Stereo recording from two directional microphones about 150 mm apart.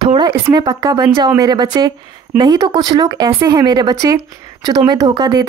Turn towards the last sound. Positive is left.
turn(degrees=-25)  # may be behind; listen again after turning